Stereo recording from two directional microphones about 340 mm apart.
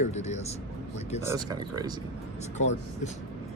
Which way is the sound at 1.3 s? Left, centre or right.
Centre.